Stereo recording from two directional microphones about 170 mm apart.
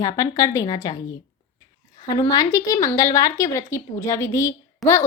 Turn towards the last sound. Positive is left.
turn(degrees=15)  # may be behind; listen again after turning